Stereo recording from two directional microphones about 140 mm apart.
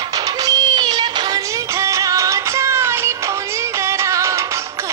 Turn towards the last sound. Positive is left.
turn(degrees=-20)  # may be behind; listen again after turning